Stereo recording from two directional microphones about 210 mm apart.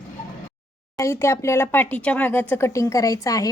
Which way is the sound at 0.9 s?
15° left (ahead or behind).